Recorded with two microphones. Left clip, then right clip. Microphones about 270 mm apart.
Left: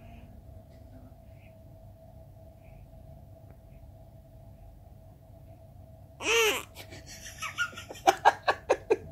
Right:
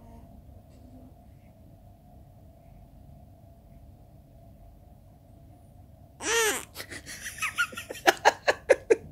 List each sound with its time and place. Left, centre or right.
6.1 s babbling: centre
6.7 s laughter: right